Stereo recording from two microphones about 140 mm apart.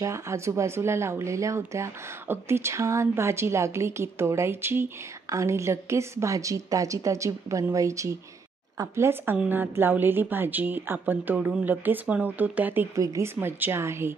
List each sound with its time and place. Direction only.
0.0 s speech: 20° right (ahead or behind)